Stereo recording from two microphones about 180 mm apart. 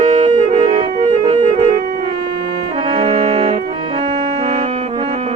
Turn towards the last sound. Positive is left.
turn(degrees=-30)  # may be behind; listen again after turning